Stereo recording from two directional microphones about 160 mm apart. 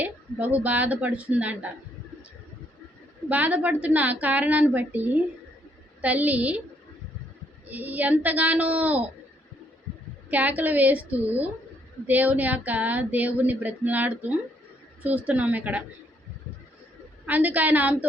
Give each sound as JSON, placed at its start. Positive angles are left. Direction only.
{"t": 0.0, "sound": "female singing", "side_deg": -10}
{"t": 3.2, "sound": "female singing", "side_deg": -10}
{"t": 7.7, "sound": "female singing", "side_deg": -10}
{"t": 10.2, "sound": "female singing", "side_deg": -10}
{"t": 17.2, "sound": "female singing", "side_deg": -10}